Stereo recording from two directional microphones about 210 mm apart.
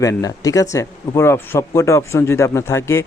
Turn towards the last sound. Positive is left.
turn(degrees=10)  # may be behind; listen again after turning